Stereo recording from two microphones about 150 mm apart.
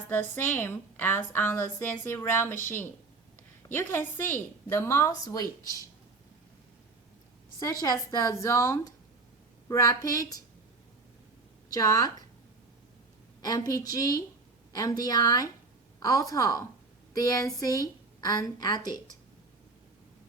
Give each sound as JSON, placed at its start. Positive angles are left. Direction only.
{"t": 0.1, "sound": "a woman's voice", "side_deg": 15}
{"t": 7.6, "sound": "a woman's voice", "side_deg": 25}
{"t": 11.7, "sound": "a woman's voice", "side_deg": 25}
{"t": 13.4, "sound": "a woman's voice", "side_deg": 25}